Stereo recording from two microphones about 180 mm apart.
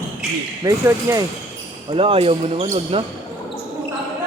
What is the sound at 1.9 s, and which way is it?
Speech, 30° right (ahead or behind).